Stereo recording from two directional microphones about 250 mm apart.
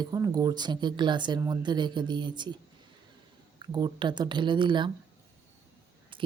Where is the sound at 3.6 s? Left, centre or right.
Centre.